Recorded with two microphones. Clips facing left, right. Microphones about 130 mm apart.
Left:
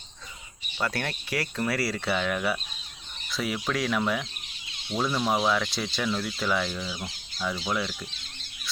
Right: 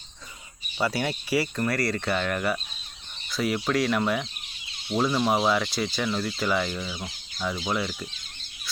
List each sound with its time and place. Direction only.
0.8 s speech: 5° right (ahead or behind)
6.8 s speech: 20° right (ahead or behind)